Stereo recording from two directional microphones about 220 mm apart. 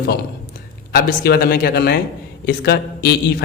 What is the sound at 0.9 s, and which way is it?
A man's voice, 45° left (ahead or behind).